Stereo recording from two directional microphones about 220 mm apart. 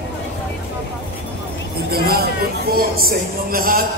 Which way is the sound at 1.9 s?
45° right (ahead or behind).